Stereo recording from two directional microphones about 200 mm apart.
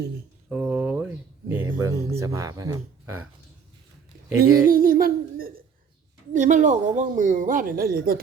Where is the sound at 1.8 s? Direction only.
15° right (ahead or behind).